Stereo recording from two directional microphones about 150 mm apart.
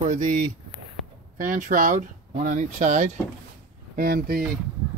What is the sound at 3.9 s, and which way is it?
Speech, 80° right.